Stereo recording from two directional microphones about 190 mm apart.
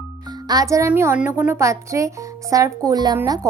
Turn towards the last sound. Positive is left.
turn(degrees=-20)  # may be behind; listen again after turning